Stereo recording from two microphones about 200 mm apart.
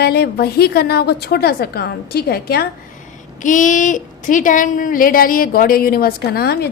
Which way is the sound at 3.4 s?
40° left (ahead or behind).